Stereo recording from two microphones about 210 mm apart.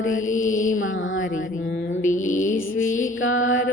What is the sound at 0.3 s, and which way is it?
Mantra, 35° left (ahead or behind).